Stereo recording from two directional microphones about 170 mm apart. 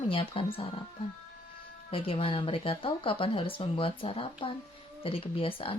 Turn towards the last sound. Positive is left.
turn(degrees=30)  # may be behind; listen again after turning